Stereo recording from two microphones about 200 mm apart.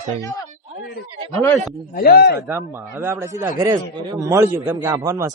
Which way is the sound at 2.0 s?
50° left (ahead or behind).